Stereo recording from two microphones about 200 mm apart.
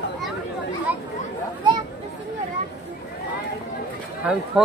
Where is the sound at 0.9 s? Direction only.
10° right (ahead or behind).